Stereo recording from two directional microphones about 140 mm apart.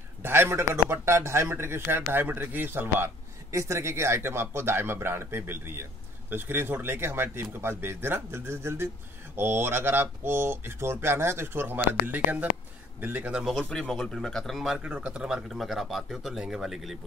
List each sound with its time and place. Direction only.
0.2 s speech: 15° right (ahead or behind); by 14.8 s centre (ahead or behind)
14.8 s speech: 10° right (ahead or behind)